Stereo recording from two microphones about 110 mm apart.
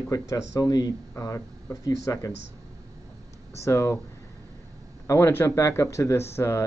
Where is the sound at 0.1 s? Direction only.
35° left (ahead or behind).